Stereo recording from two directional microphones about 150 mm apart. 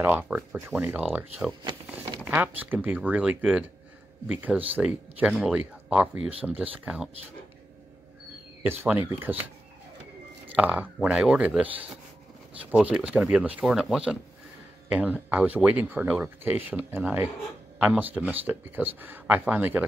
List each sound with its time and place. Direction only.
0.0 s speech: 10° right (ahead or behind)
2.2 s speech: 10° right (ahead or behind)
8.6 s speech: 15° right (ahead or behind)